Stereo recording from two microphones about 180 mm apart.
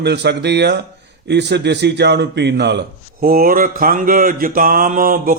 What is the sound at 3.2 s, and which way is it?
Mantra, 55° right (ahead or behind).